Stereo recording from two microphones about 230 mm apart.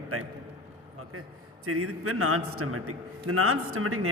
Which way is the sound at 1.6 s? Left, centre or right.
Right.